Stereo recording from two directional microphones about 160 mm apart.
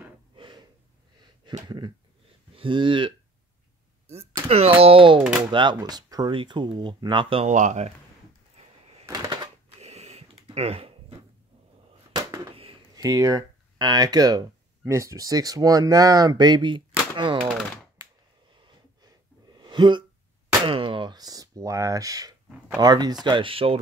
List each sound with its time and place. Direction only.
0.4 s gasp: 30° right (ahead or behind)
2.5 s speech: 30° right (ahead or behind)
4.5 s speech: 40° right (ahead or behind)
7.4 s speech: 50° right (ahead or behind)
9.0 s typewriter: 25° right (ahead or behind)
9.7 s a sound: 45° right (ahead or behind)
12.1 s a sound: 20° right (ahead or behind)
12.9 s speech: 20° right (ahead or behind)
19.0 s a sound: 25° right (ahead or behind)
22.8 s speech: 25° right (ahead or behind)